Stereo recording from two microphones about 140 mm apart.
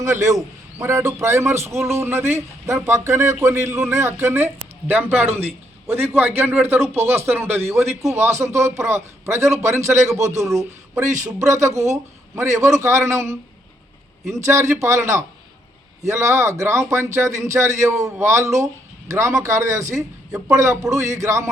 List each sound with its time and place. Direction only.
0.0 s a man's voice: 20° right (ahead or behind)